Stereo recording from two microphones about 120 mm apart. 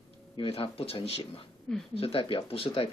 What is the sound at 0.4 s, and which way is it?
Speech, 50° left (ahead or behind).